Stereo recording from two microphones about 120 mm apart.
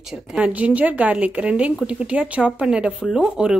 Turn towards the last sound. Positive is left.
turn(degrees=-10)  # may be behind; listen again after turning